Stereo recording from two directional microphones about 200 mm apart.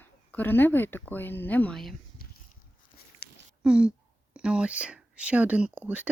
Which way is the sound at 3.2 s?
50° left (ahead or behind).